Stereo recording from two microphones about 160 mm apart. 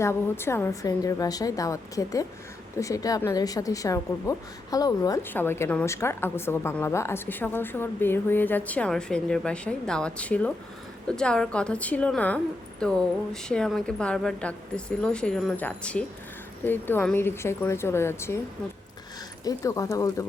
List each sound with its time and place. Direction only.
0.0 s a woman's voice: 15° left (ahead or behind)
19.5 s a woman's voice: 20° left (ahead or behind)